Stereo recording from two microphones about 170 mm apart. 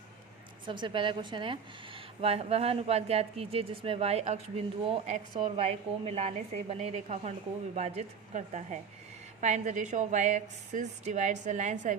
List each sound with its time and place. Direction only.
0.6 s a woman's voice: 30° right (ahead or behind); by 11.9 s 45° right (ahead or behind)